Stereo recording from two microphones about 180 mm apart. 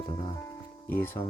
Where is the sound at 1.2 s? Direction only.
30° left (ahead or behind).